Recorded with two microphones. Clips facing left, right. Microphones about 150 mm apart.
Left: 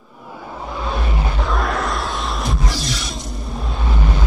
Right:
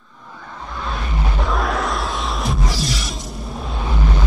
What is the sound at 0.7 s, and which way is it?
Vehicle, 10° left (ahead or behind).